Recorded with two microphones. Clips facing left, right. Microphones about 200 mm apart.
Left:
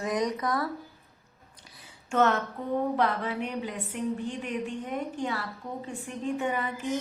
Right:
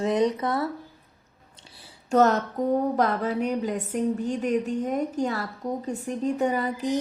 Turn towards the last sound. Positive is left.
turn(degrees=-35)  # may be behind; listen again after turning